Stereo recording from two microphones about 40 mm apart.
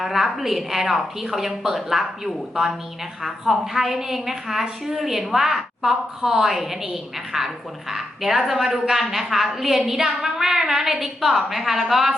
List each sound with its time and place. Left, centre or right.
0.0 s a woman's voice: centre